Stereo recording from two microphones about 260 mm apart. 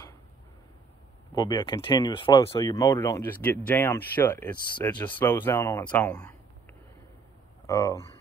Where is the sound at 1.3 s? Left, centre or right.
Centre.